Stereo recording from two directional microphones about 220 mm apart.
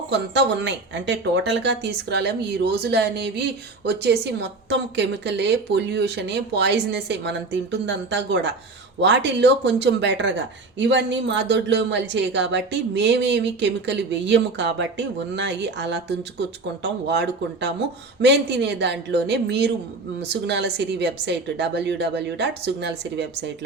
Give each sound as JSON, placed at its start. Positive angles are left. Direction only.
{"t": 0.1, "sound": "speech", "side_deg": -50}